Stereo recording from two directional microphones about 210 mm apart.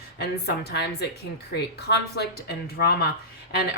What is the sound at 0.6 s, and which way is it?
Speech, 50° left (ahead or behind).